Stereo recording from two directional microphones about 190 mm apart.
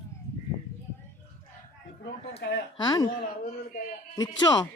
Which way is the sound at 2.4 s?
60° left (ahead or behind).